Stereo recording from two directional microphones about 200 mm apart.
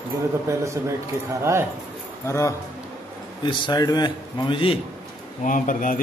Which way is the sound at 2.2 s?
15° left (ahead or behind).